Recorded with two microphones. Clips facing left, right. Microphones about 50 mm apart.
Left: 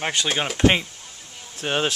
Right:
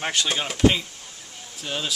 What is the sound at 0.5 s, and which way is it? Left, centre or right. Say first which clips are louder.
Speech: left 1 dB; left.